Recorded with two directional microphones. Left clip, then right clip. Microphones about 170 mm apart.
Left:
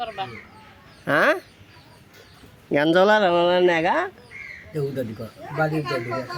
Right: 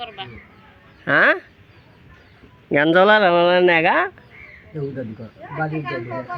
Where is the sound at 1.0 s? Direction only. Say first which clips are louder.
Right 4 dB; 15° left (ahead or behind).